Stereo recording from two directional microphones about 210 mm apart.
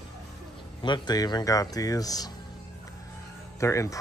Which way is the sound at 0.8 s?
20° left (ahead or behind).